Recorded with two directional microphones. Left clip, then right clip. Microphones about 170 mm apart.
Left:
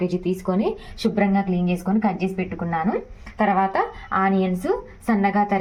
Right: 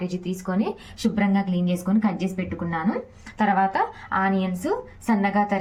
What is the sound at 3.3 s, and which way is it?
A woman's voice, 15° left (ahead or behind).